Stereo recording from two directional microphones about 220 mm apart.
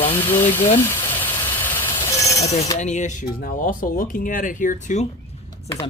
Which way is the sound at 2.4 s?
30° left (ahead or behind).